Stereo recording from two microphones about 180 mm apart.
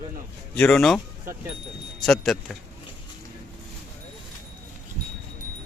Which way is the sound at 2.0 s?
Centre (ahead or behind).